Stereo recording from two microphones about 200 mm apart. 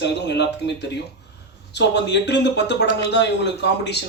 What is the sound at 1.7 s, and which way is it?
A man's voice, 60° left (ahead or behind).